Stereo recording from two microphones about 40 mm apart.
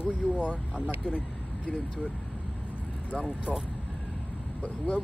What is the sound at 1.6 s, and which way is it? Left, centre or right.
Speech, left.